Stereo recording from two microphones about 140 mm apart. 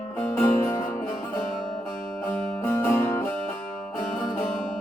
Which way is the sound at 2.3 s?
15° left (ahead or behind).